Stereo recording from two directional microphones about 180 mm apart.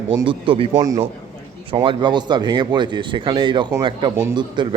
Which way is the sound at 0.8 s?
20° right (ahead or behind).